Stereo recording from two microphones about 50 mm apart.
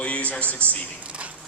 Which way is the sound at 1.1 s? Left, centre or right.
Right.